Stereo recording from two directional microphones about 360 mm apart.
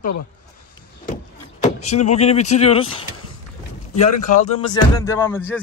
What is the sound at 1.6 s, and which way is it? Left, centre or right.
A man's voice, centre.